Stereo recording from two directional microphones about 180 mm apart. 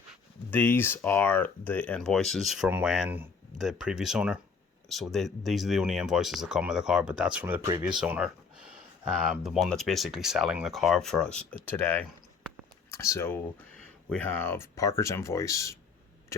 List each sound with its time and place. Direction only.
0.5 s speech: 10° left (ahead or behind)